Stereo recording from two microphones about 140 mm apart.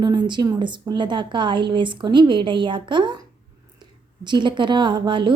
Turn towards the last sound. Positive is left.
turn(degrees=-35)  # may be behind; listen again after turning